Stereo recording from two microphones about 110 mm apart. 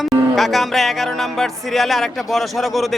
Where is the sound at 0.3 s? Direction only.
Centre (ahead or behind).